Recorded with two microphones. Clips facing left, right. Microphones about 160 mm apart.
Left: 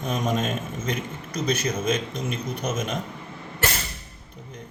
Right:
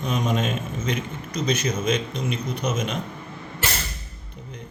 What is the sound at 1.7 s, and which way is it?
Speech, 50° left (ahead or behind).